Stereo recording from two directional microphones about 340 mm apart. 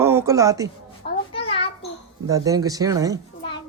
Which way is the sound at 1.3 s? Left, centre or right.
Centre.